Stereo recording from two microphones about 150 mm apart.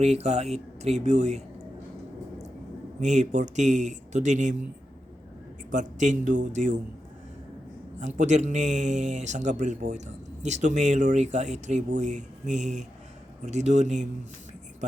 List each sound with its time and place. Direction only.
0.0 s speech: 45° right (ahead or behind)
3.0 s speech: 50° right (ahead or behind)
5.7 s speech: 55° right (ahead or behind)
7.9 s speech: 50° right (ahead or behind)